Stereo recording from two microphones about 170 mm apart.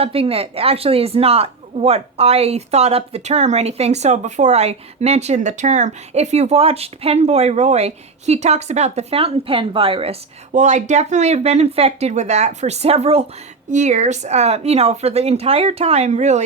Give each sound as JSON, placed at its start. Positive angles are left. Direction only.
{"t": 0.0, "sound": "speech", "side_deg": -35}